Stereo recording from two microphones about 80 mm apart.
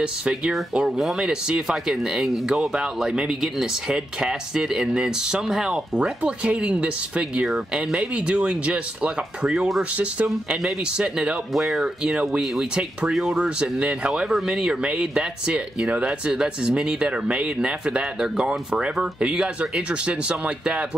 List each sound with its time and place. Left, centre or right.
0.0 s speech: centre